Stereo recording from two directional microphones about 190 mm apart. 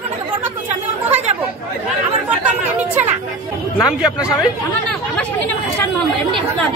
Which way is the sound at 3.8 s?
5° right (ahead or behind).